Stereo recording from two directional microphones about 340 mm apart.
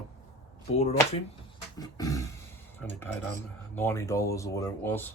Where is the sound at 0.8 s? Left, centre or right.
Centre.